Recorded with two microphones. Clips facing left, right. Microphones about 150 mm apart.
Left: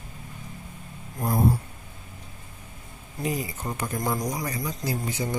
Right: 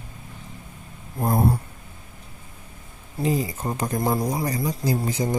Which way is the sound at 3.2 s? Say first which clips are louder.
Right 5 dB; 35° right (ahead or behind).